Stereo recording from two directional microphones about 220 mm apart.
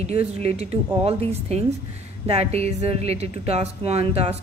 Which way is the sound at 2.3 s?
30° right (ahead or behind).